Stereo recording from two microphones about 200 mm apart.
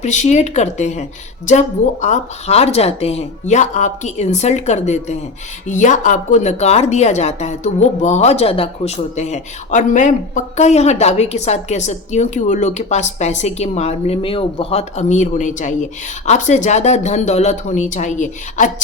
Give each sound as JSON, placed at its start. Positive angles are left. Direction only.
{"t": 0.0, "sound": "speech", "side_deg": 35}